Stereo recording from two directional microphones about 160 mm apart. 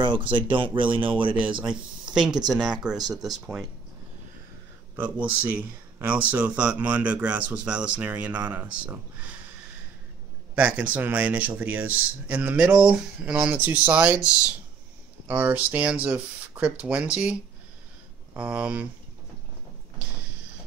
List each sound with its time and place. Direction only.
0.0 s speech: 30° right (ahead or behind)
1.6 s speech: 5° right (ahead or behind)
4.9 s speech: 10° right (ahead or behind)
10.5 s speech: 10° right (ahead or behind)